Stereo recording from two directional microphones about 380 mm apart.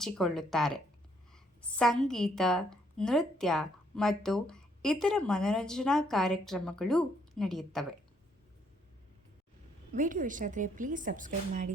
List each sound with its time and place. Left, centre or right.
0.0 s a woman's voice: centre
1.8 s a woman's voice: centre
9.9 s speech: centre